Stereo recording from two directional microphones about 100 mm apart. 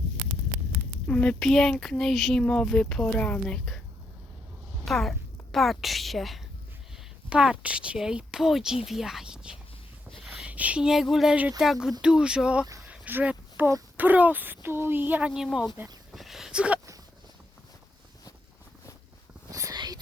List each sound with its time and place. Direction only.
1.0 s speech: 10° left (ahead or behind)
4.9 s a woman's voice: 5° left (ahead or behind)
7.3 s a woman's voice: 10° right (ahead or behind)
12.8 s a sound: 15° right (ahead or behind)
13.9 s speech: 15° right (ahead or behind)
15.3 s speech: 5° right (ahead or behind)
16.1 s a sound: centre (ahead or behind)
19.5 s whispering: 35° right (ahead or behind)